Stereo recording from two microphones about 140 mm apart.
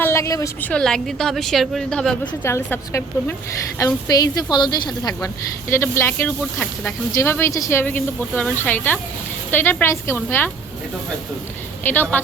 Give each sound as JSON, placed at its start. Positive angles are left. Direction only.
{"t": 0.0, "sound": "a woman's voice", "side_deg": 20}
{"t": 0.7, "sound": "a woman's voice", "side_deg": 5}
{"t": 2.4, "sound": "speech", "side_deg": 15}
{"t": 3.8, "sound": "speech", "side_deg": 25}
{"t": 11.8, "sound": "a woman's voice", "side_deg": 15}